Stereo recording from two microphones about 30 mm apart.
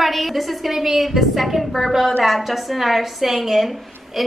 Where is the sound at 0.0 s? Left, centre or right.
Centre.